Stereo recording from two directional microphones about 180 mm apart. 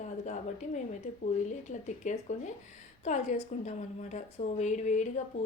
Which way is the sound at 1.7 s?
40° left (ahead or behind).